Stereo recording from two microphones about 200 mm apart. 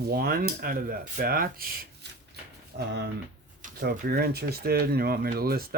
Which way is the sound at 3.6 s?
40° right (ahead or behind).